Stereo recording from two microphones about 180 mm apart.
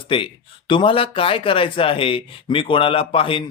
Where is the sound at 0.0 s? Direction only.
30° left (ahead or behind).